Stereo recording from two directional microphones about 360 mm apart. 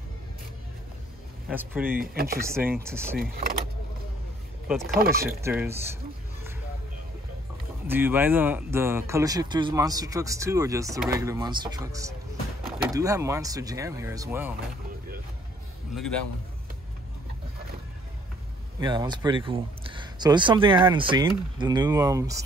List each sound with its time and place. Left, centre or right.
1.5 s speech: centre
1.9 s speech: right
2.4 s speech: centre
3.2 s speech: right
4.6 s speech: centre
7.8 s speech: centre
15.9 s a man's voice: centre
18.8 s speech: centre